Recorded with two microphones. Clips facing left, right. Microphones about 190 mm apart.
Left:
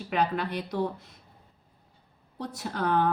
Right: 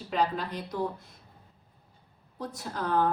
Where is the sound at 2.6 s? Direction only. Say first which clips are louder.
Left 1 dB; 65° left (ahead or behind).